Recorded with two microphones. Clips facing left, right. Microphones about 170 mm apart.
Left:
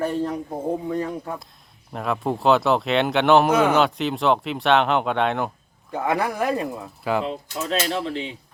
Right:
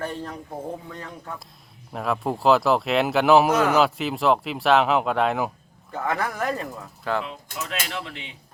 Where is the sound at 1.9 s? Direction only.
Centre (ahead or behind).